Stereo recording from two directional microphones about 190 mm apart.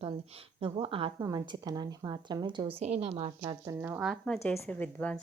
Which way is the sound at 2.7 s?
35° right (ahead or behind).